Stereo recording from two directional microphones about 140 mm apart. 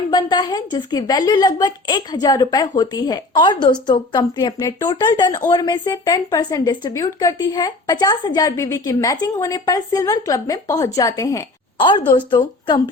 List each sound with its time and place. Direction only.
0.1 s a woman's voice: 30° left (ahead or behind)
11.8 s a woman's voice: 35° left (ahead or behind)